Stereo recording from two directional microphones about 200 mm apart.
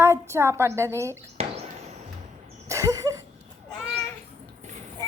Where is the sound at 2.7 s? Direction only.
15° right (ahead or behind).